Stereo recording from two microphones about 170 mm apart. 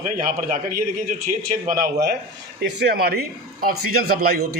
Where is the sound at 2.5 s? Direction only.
70° right (ahead or behind).